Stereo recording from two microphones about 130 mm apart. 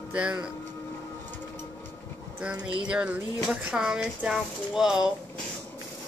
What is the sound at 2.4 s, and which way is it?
Speech, 10° right (ahead or behind).